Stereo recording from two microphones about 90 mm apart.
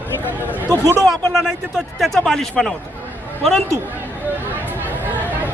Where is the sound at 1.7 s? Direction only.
Centre (ahead or behind).